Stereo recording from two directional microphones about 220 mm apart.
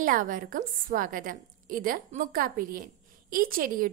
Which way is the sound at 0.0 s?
40° right (ahead or behind).